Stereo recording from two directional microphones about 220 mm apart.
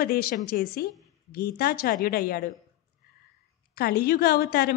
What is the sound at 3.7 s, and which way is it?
A woman's voice, 45° left (ahead or behind).